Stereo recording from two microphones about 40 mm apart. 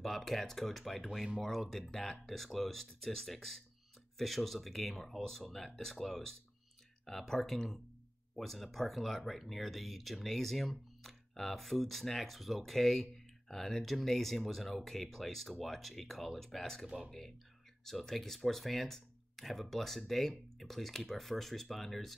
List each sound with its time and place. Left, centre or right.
0.0 s speech: centre
17.8 s speech: centre